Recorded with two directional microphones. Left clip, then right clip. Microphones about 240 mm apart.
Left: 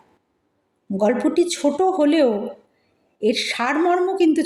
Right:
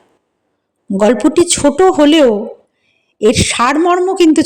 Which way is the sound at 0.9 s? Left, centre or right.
Right.